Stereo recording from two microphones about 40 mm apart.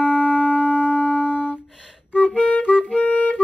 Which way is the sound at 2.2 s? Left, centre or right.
Left.